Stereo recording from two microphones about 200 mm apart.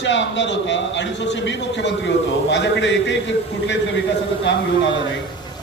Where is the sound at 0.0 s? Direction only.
65° left (ahead or behind).